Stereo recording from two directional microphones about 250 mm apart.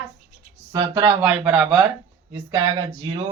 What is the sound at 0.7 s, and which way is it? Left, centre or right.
Speech, centre.